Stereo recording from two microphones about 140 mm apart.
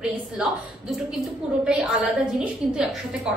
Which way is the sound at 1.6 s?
5° right (ahead or behind).